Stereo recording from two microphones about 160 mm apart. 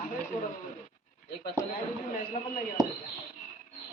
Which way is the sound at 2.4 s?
55° left (ahead or behind).